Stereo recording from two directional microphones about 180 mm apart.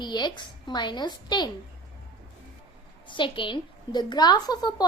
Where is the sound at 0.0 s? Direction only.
25° left (ahead or behind).